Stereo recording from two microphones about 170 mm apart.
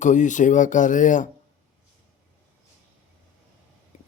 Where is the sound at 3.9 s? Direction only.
45° left (ahead or behind).